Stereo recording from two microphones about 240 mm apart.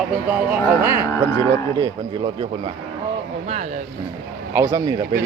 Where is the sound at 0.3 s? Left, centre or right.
Centre.